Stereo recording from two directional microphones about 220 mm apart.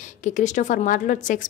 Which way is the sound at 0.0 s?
35° left (ahead or behind).